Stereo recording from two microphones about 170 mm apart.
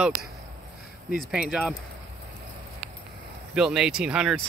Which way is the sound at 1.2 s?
5° right (ahead or behind).